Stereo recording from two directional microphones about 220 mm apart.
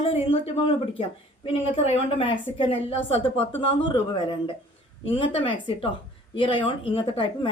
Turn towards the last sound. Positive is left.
turn(degrees=25)  # may be behind; listen again after turning